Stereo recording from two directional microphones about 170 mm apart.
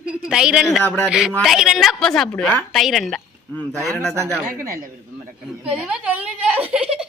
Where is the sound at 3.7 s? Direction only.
15° right (ahead or behind).